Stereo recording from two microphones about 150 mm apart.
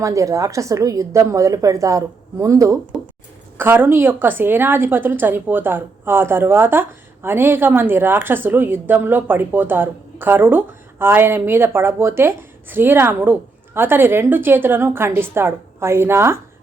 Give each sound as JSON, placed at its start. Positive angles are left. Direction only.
{"t": 0.0, "sound": "a woman's voice", "side_deg": -20}